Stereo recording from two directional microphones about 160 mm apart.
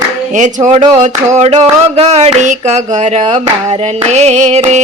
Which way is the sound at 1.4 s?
40° right (ahead or behind).